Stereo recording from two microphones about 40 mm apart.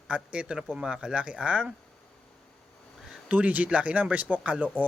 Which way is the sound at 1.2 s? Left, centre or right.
Right.